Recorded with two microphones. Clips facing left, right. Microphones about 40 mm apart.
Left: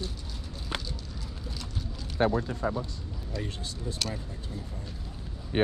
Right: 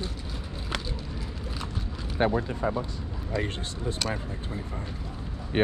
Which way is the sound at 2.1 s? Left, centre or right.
Right.